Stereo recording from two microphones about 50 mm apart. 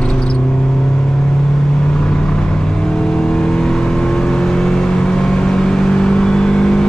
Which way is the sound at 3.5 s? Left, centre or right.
Centre.